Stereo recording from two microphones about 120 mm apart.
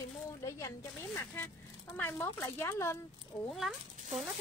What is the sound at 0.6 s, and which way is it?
Speech, 25° left (ahead or behind).